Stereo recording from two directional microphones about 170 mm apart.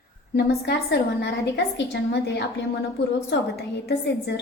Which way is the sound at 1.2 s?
85° left.